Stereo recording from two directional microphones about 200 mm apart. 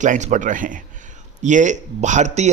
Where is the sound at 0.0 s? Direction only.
40° right (ahead or behind).